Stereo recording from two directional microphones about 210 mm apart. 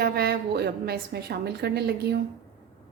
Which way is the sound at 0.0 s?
50° right (ahead or behind).